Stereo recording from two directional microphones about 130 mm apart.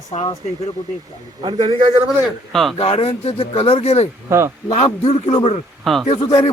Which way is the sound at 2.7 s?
50° left (ahead or behind).